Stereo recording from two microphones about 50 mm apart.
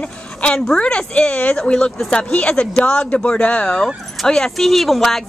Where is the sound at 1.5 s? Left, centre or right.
Centre.